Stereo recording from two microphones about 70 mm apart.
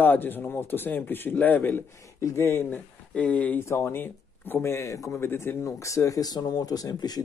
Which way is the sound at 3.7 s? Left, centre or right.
Left.